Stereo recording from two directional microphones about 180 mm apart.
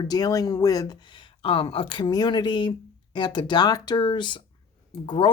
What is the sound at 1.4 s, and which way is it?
Speech, 30° left (ahead or behind).